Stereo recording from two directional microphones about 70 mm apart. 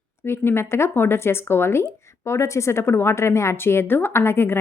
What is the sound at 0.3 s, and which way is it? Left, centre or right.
A woman's voice, left.